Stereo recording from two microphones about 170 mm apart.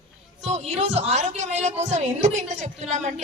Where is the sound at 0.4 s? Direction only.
40° right (ahead or behind).